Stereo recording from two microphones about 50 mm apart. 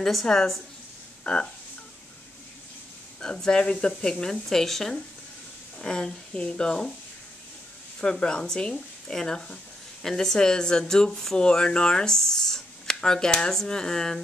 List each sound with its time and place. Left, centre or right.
0.0 s speech: centre
1.2 s speech: left
3.2 s speech: centre
8.0 s speech: centre